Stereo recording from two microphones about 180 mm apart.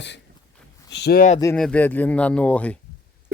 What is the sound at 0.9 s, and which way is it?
Speech, 65° left (ahead or behind).